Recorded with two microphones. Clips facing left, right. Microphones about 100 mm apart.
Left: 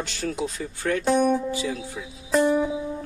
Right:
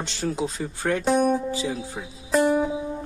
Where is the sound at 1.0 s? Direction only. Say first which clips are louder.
Even; 5° right (ahead or behind).